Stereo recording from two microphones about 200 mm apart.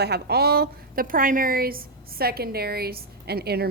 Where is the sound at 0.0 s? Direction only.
55° right (ahead or behind).